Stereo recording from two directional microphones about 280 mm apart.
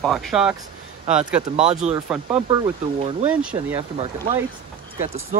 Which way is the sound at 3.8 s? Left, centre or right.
Centre.